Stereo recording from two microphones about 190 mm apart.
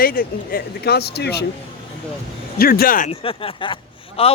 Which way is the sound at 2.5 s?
50° left (ahead or behind).